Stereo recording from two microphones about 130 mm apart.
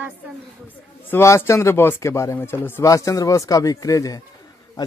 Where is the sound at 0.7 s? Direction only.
15° left (ahead or behind).